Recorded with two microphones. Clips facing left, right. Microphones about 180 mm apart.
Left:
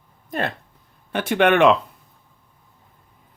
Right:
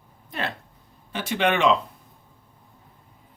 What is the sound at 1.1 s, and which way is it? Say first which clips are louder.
Speech: left 6 dB; 55° left (ahead or behind).